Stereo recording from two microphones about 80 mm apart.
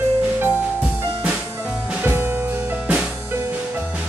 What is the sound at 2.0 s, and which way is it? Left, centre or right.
Music, right.